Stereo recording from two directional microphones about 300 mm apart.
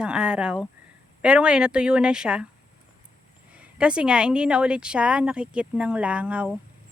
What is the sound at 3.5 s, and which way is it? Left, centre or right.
A woman's voice, centre.